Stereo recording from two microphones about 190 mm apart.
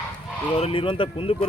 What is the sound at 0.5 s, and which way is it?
Speech, 30° left (ahead or behind).